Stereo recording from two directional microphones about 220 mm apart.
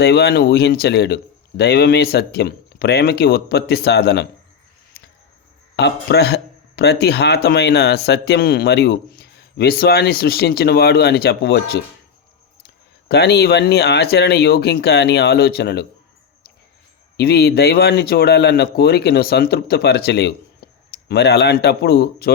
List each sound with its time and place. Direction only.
0.0 s speech: 50° left (ahead or behind)
5.7 s speech: 50° left (ahead or behind)
13.1 s speech: 50° left (ahead or behind)
17.2 s speech: 45° left (ahead or behind)